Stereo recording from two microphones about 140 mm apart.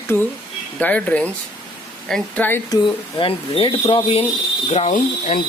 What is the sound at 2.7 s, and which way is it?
Speech, 40° left (ahead or behind).